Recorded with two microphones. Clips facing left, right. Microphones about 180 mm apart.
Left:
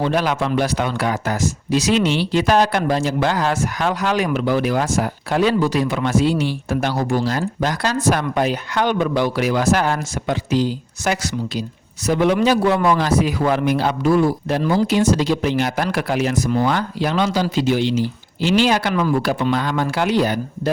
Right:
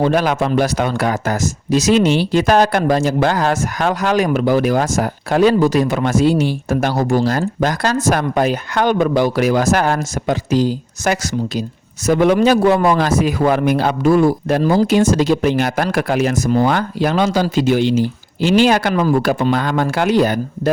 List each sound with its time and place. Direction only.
0.0 s speech: 45° right (ahead or behind)